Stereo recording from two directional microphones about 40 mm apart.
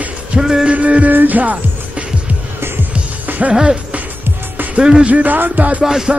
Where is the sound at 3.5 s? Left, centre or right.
Right.